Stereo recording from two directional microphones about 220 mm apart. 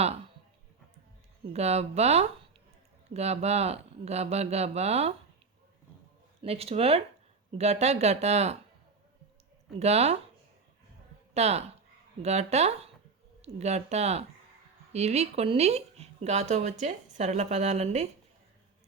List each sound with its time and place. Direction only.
1.5 s speech: 30° right (ahead or behind)
6.4 s speech: 25° right (ahead or behind)
9.7 s speech: 30° right (ahead or behind)
11.3 s speech: 30° right (ahead or behind)